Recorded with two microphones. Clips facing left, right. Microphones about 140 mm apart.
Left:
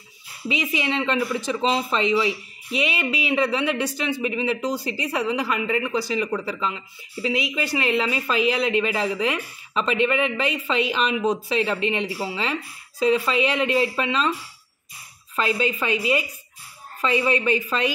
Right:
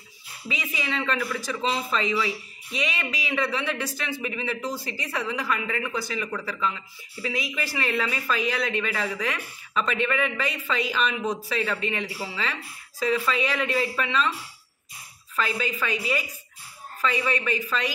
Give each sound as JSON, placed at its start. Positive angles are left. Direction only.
{"t": 0.7, "sound": "speech", "side_deg": 25}
{"t": 15.3, "sound": "speech", "side_deg": 30}